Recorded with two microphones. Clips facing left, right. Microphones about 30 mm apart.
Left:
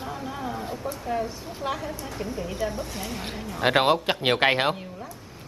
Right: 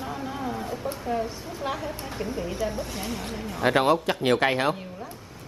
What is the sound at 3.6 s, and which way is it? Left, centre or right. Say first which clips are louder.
Speech: left 1 dB; left.